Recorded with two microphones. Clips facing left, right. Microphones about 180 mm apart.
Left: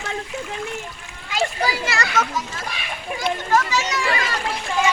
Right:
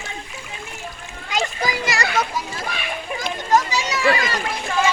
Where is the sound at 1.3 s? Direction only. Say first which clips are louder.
Left 1 dB; 15° right (ahead or behind).